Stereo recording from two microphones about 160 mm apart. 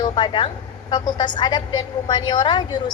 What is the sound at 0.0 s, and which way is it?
A woman's voice, 30° left (ahead or behind).